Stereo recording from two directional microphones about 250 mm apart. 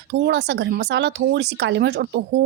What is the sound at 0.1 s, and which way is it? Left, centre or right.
Speech, right.